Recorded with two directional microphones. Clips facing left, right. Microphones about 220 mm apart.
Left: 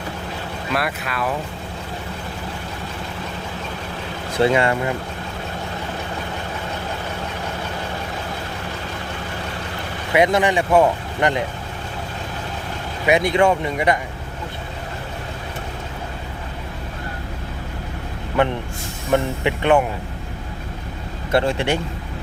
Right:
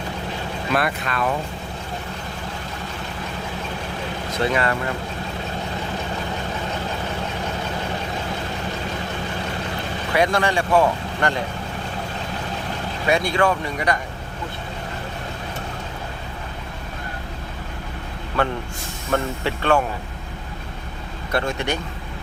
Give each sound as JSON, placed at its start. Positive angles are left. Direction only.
{"t": 0.8, "sound": "speech", "side_deg": 5}
{"t": 4.5, "sound": "speech", "side_deg": 20}
{"t": 10.1, "sound": "speech", "side_deg": 20}
{"t": 13.1, "sound": "speech", "side_deg": 20}
{"t": 18.4, "sound": "speech", "side_deg": 20}
{"t": 21.3, "sound": "speech", "side_deg": 30}